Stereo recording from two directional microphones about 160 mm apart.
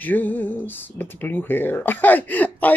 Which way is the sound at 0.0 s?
10° left (ahead or behind).